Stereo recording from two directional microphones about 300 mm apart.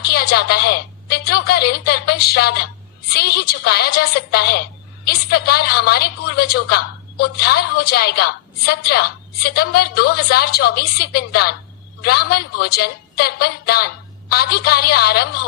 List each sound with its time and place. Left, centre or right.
0.0 s a woman's voice: left